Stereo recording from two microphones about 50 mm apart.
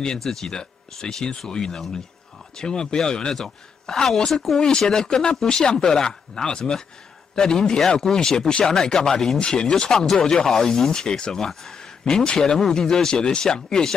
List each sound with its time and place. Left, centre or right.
0.0 s speech: centre
4.6 s speech: centre